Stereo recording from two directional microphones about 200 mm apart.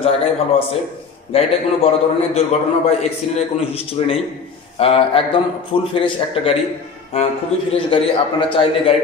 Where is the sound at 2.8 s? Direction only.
30° left (ahead or behind).